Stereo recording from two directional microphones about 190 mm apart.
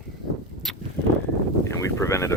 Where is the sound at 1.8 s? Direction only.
15° left (ahead or behind).